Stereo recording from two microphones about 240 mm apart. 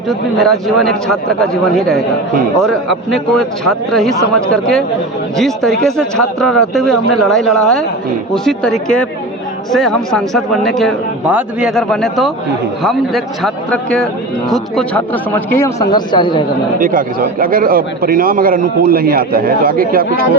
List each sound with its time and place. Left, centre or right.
0.1 s speech: centre
16.8 s a man's voice: right